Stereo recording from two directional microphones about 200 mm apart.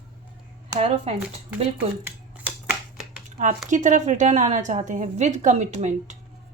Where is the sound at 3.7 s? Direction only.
40° right (ahead or behind).